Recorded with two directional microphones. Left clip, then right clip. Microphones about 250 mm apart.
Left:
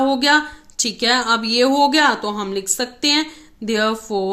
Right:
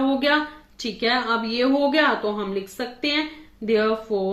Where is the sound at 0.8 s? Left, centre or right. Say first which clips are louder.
Left 5 dB; left.